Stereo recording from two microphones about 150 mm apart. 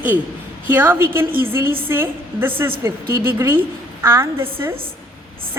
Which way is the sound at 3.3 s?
15° right (ahead or behind).